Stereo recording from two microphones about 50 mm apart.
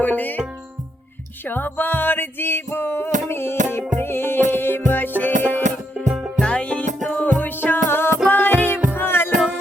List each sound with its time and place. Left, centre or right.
0.0 s music: left
1.5 s music: left
6.4 s music: left
7.2 s music: left